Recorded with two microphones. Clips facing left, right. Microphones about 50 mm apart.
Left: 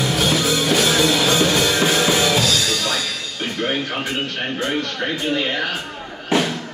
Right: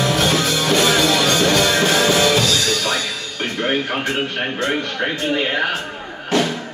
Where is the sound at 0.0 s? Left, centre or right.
Centre.